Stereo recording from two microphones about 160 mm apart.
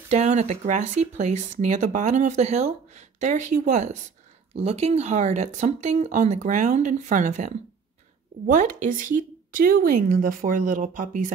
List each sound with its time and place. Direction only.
0.1 s speech: 45° right (ahead or behind)